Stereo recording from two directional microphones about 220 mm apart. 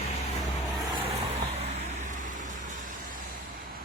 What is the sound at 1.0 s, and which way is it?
Vehicle, 30° right (ahead or behind).